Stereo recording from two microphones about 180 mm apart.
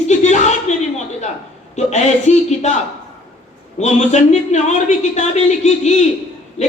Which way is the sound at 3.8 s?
40° left (ahead or behind).